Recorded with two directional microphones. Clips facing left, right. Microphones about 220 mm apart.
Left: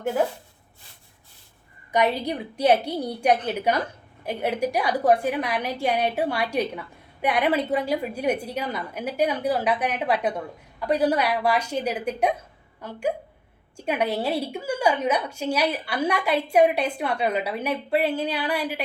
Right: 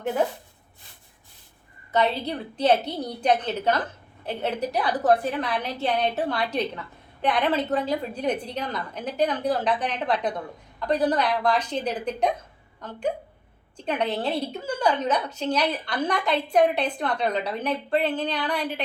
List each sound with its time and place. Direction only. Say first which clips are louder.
1.9 s a woman's voice: left 1 dB; 15° left (ahead or behind)